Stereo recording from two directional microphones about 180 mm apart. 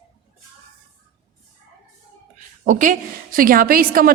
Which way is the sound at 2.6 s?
45° right (ahead or behind).